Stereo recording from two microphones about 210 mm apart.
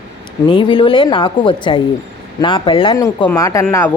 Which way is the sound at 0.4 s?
20° left (ahead or behind).